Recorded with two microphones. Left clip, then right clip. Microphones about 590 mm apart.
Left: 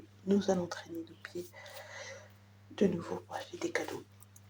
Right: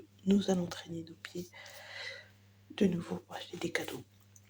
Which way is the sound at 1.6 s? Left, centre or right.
Right.